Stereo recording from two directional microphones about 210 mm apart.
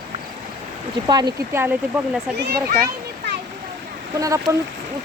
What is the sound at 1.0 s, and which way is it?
Speech, 20° right (ahead or behind).